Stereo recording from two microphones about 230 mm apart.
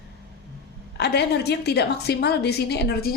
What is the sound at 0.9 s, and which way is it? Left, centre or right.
A woman's voice, left.